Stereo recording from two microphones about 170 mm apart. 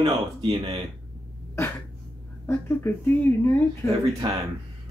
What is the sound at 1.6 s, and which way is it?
Speech, 15° left (ahead or behind).